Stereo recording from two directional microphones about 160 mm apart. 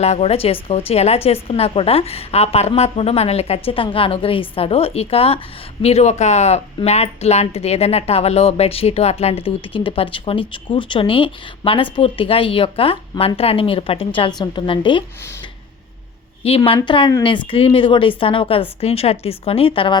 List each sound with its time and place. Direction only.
0.0 s a woman's voice: 40° left (ahead or behind)
16.6 s speech: 30° left (ahead or behind)